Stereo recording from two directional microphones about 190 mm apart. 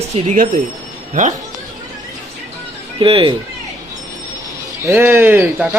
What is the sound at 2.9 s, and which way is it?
Speech, 30° right (ahead or behind).